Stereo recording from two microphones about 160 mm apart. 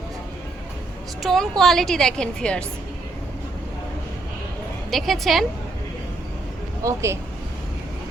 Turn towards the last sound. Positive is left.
turn(degrees=-15)  # may be behind; listen again after turning